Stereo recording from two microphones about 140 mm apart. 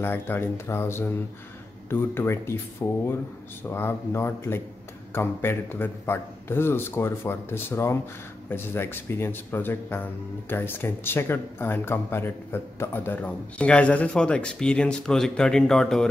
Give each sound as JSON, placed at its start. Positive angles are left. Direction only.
{"t": 0.0, "sound": "speech", "side_deg": 15}